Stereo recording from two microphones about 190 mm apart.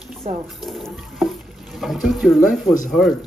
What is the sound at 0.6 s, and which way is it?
Speech, centre (ahead or behind).